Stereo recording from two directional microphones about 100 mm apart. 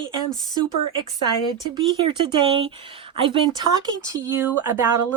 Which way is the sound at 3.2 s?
60° right (ahead or behind).